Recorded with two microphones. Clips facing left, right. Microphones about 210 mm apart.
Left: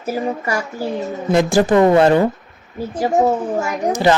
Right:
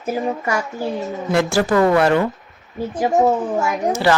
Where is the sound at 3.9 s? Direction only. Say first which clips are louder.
Left 3 dB; 15° left (ahead or behind).